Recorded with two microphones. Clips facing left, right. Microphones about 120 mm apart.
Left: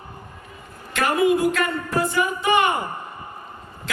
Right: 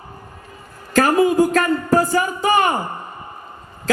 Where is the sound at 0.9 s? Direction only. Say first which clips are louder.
Right 5 dB; 35° right (ahead or behind).